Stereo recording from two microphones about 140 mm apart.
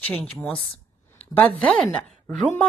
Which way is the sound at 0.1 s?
Centre (ahead or behind).